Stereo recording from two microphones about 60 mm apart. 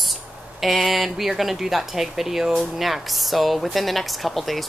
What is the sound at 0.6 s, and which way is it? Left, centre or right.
A woman's voice, centre.